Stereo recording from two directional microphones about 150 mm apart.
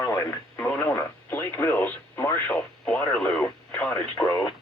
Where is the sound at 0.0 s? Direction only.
25° left (ahead or behind).